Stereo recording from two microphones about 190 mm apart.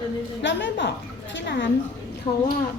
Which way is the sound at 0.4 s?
70° left (ahead or behind).